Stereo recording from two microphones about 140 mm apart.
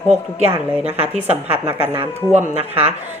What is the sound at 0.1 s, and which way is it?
Speech, 50° right (ahead or behind).